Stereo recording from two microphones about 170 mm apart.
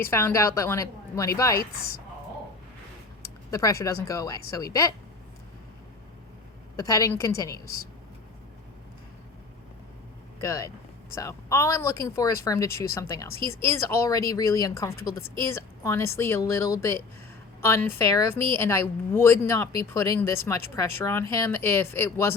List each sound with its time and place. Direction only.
0.1 s speech: 15° left (ahead or behind)
3.5 s speech: 20° left (ahead or behind)
6.7 s speech: 20° left (ahead or behind)
10.4 s speech: 20° left (ahead or behind)